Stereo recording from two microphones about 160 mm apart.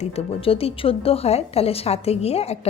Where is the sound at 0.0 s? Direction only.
35° left (ahead or behind).